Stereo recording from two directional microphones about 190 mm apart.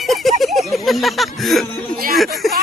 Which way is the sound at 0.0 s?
Centre (ahead or behind).